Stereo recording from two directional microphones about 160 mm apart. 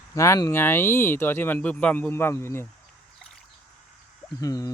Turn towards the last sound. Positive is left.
turn(degrees=20)  # may be behind; listen again after turning